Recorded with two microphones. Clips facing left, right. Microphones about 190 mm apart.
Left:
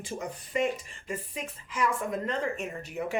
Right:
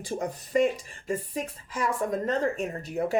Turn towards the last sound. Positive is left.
turn(degrees=-35)  # may be behind; listen again after turning